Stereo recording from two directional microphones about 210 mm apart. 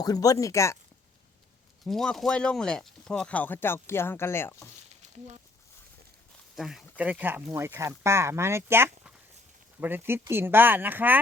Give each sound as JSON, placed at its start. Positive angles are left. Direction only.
{"t": 0.0, "sound": "speech", "side_deg": 15}
{"t": 1.8, "sound": "speech", "side_deg": 0}
{"t": 4.9, "sound": "a sound", "side_deg": -35}
{"t": 6.6, "sound": "speech", "side_deg": 0}